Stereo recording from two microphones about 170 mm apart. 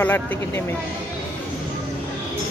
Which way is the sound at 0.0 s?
10° left (ahead or behind).